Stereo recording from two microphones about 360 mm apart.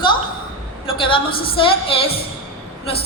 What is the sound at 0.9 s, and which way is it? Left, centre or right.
A woman's voice, centre.